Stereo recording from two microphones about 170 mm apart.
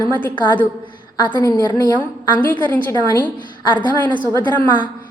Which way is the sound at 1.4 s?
20° left (ahead or behind).